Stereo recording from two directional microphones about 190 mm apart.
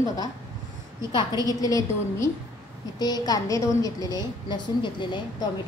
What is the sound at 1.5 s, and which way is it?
A woman's voice, 20° left (ahead or behind).